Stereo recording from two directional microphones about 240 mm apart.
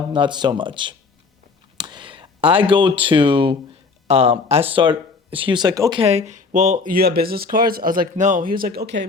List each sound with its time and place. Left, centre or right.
0.1 s speech: centre; by 9.0 s right